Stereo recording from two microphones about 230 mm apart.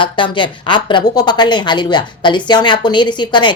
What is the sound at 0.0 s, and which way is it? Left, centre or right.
A woman's voice, left.